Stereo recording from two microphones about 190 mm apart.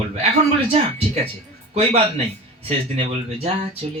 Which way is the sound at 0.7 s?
35° right (ahead or behind).